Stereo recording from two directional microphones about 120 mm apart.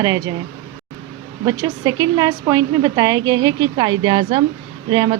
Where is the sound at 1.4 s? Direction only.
35° right (ahead or behind).